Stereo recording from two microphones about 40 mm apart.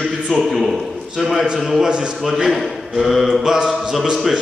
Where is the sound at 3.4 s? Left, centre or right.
Centre.